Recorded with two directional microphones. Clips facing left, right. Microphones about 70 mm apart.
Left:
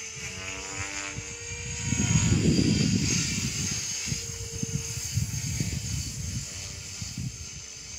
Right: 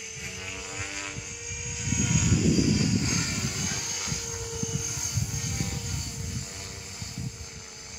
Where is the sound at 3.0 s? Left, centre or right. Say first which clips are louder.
Right 1 dB; right.